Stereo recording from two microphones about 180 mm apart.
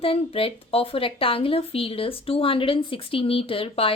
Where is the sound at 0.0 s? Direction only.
30° left (ahead or behind).